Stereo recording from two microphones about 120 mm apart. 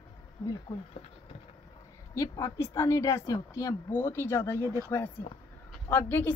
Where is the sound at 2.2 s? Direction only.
25° left (ahead or behind).